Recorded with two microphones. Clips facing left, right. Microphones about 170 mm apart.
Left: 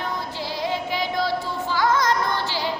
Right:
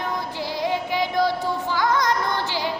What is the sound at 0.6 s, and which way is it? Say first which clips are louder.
Child singing: right 2 dB; 15° right (ahead or behind).